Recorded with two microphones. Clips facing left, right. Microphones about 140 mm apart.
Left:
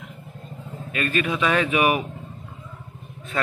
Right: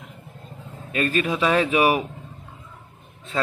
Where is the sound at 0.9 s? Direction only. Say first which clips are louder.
Right 2 dB; 35° right (ahead or behind).